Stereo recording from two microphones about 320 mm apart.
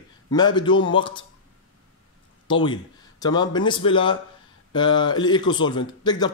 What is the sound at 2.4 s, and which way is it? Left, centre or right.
Speech, centre.